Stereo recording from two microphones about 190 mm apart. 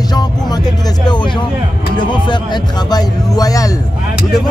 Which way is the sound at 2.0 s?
25° left (ahead or behind).